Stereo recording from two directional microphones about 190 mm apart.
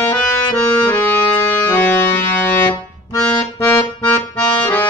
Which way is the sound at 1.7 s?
15° left (ahead or behind).